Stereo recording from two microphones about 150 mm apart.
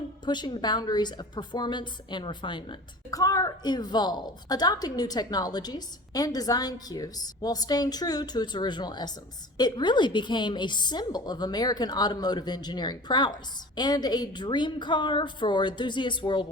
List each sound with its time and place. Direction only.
0.3 s a woman's voice: 30° left (ahead or behind)